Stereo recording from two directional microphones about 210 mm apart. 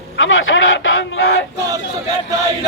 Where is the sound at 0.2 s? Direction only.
65° left (ahead or behind).